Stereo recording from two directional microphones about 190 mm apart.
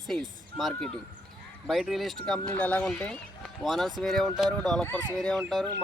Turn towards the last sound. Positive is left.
turn(degrees=0)  # may be behind; listen again after turning